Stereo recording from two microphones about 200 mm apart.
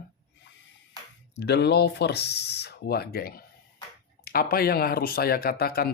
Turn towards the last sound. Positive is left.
turn(degrees=50)  # may be behind; listen again after turning